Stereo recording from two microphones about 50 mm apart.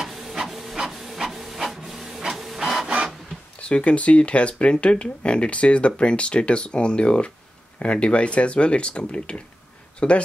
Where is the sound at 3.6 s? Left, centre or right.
Left.